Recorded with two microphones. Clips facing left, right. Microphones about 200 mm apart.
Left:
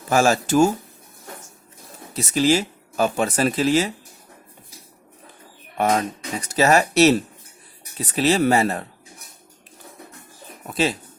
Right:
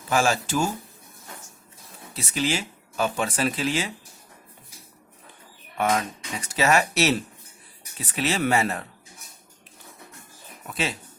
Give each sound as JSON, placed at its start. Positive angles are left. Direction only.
{"t": 0.1, "sound": "speech", "side_deg": 45}
{"t": 2.1, "sound": "speech", "side_deg": 40}
{"t": 5.7, "sound": "speech", "side_deg": 35}
{"t": 10.7, "sound": "speech", "side_deg": 35}